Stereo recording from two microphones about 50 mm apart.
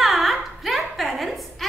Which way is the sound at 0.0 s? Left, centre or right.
Centre.